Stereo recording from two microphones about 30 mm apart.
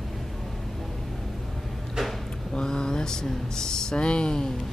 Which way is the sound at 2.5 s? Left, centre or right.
Left.